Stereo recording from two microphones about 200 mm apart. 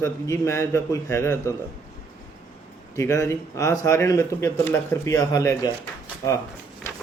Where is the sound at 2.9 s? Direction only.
15° left (ahead or behind).